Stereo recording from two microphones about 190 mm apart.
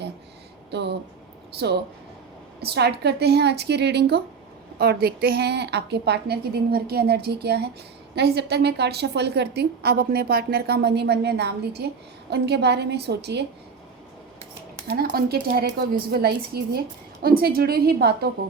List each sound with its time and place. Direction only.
0.7 s a woman's voice: 60° right (ahead or behind)
2.6 s a woman's voice: 60° right (ahead or behind)
14.8 s a woman's voice: 50° right (ahead or behind)